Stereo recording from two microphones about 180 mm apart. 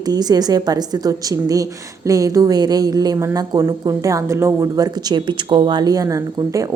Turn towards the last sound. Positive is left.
turn(degrees=-20)  # may be behind; listen again after turning